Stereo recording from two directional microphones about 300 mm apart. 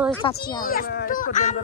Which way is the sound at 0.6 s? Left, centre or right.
Left.